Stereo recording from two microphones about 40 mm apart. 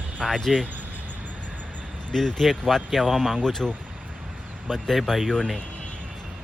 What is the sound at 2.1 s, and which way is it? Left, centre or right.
Speech, centre.